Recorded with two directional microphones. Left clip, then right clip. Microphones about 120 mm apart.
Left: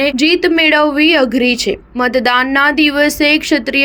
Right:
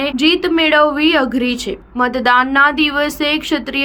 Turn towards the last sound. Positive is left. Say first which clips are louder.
# left 5 dB
turn(degrees=30)  # may be behind; listen again after turning